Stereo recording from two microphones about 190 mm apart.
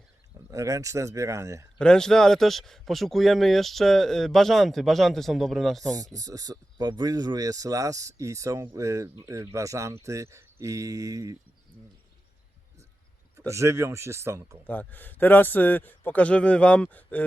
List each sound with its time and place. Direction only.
0.5 s speech: 15° right (ahead or behind)
1.8 s a man's voice: 5° left (ahead or behind)
6.1 s speech: 20° right (ahead or behind)
13.5 s speech: 15° right (ahead or behind)
14.7 s a man's voice: 10° left (ahead or behind)